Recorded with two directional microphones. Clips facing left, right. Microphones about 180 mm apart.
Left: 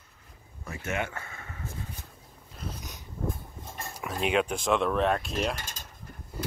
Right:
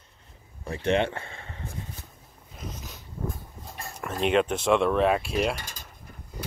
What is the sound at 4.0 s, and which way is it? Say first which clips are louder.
Mechanisms: right 3 dB; 5° left (ahead or behind).